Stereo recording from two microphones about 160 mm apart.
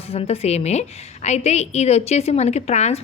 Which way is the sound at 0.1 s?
40° left (ahead or behind).